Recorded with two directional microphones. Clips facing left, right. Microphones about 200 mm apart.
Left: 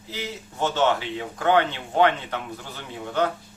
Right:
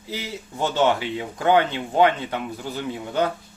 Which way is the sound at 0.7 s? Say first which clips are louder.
Right 3 dB; 15° right (ahead or behind).